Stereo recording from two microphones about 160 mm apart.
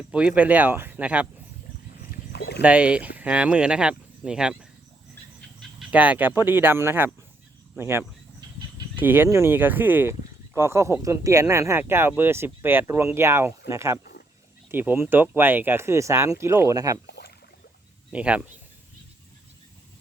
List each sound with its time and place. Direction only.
0.1 s speech: 10° right (ahead or behind)
2.0 s a sound: 85° left
2.6 s speech: 10° right (ahead or behind)
5.9 s speech: 10° right (ahead or behind)
17.1 s a sound: 90° left
18.1 s speech: 10° right (ahead or behind)